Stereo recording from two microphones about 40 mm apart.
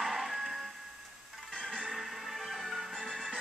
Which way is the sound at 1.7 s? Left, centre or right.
Centre.